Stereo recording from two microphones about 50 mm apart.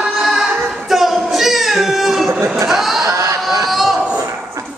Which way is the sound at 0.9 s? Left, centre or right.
Centre.